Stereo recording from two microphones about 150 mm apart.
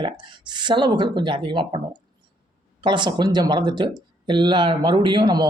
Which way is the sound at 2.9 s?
30° right (ahead or behind).